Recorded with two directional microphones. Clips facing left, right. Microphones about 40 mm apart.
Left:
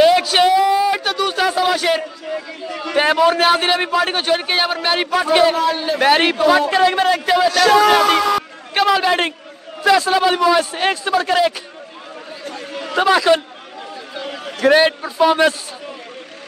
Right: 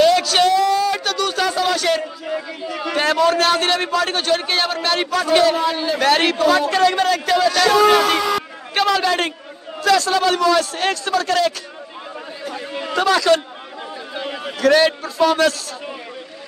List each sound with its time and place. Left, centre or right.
0.0 s a sound: centre
2.2 s speech: centre
3.0 s a man's voice: centre
12.9 s a man's voice: centre
14.6 s a man's voice: left